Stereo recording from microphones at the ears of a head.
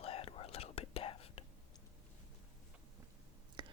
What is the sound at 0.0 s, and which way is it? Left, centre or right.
Whispering, left.